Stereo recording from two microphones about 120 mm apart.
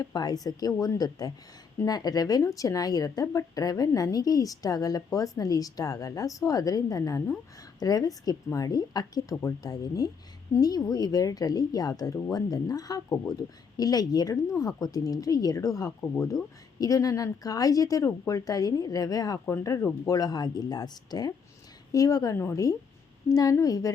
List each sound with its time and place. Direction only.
0.0 s a woman's voice: 35° left (ahead or behind)